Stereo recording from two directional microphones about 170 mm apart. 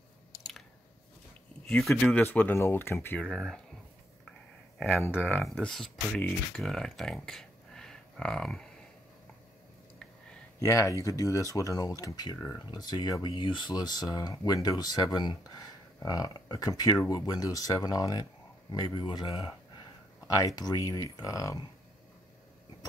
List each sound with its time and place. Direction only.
1.7 s speech: 5° left (ahead or behind)
4.7 s speech: 10° left (ahead or behind)
5.1 s speech: 5° right (ahead or behind)
10.6 s speech: 20° left (ahead or behind)